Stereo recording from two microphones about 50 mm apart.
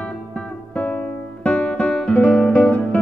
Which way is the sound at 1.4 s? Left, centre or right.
Left.